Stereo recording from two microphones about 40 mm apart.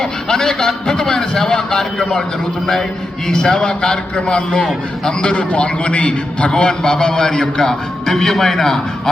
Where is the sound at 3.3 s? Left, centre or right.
Centre.